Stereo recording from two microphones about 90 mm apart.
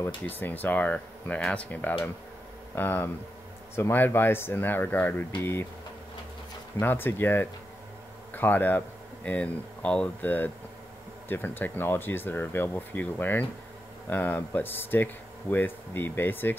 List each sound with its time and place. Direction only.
0.2 s speech: 20° left (ahead or behind)
6.8 s speech: 25° left (ahead or behind)